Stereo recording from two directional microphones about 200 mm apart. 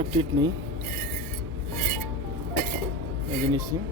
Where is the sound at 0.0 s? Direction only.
25° right (ahead or behind).